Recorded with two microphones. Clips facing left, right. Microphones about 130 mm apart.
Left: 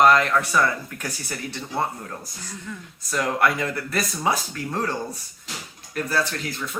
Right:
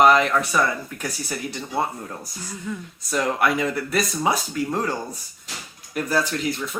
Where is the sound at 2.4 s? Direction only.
10° right (ahead or behind).